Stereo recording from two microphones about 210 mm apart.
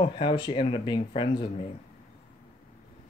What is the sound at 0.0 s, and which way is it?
Speech, 20° left (ahead or behind).